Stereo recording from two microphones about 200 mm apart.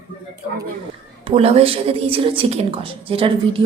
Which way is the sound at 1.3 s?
30° right (ahead or behind).